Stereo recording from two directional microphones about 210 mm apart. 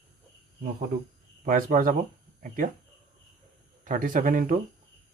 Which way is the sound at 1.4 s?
40° right (ahead or behind).